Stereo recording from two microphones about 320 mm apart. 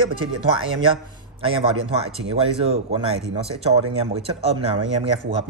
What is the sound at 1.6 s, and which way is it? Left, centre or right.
Speech, centre.